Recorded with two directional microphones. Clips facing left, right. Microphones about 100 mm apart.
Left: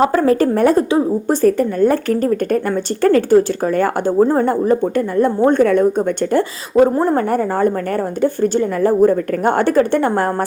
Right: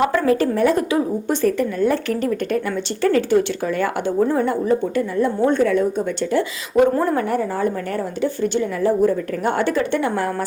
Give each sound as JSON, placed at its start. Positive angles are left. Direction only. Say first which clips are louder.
{"t": 0.0, "sound": "speech", "louder": "left 4 dB", "side_deg": 40}
{"t": 0.8, "sound": "speech", "louder": "left 5 dB", "side_deg": 30}
{"t": 1.3, "sound": "speech", "louder": "left 5 dB", "side_deg": 40}
{"t": 6.9, "sound": "speech", "louder": "left 4 dB", "side_deg": 30}
{"t": 7.3, "sound": "speech", "louder": "left 5 dB", "side_deg": 50}